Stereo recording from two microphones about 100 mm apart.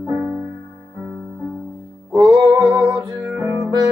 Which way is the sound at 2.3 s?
40° right (ahead or behind).